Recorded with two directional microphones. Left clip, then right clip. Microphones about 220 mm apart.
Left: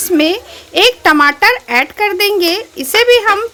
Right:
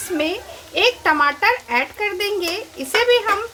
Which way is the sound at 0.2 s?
50° left (ahead or behind).